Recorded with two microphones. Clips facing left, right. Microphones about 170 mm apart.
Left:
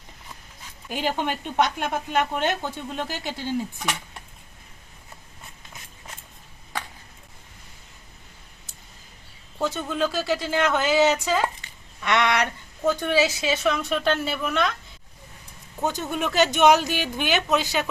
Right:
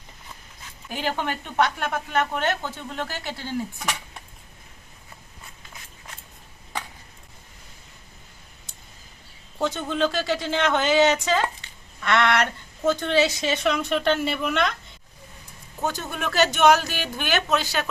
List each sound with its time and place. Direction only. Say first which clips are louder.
0.9 s speech: left 1 dB; 15° left (ahead or behind)
9.6 s a woman's voice: right 1 dB; 5° left (ahead or behind)
15.8 s speech: left 2 dB; 15° left (ahead or behind)